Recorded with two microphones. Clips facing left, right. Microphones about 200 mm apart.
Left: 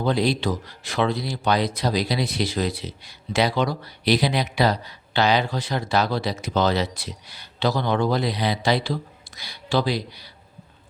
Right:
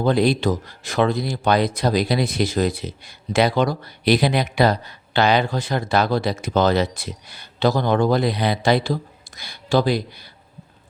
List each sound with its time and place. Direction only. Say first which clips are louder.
0.0 s speech: right 4 dB; 50° right (ahead or behind)